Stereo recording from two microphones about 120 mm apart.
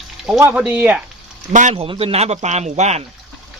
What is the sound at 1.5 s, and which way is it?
Speech, 90° right.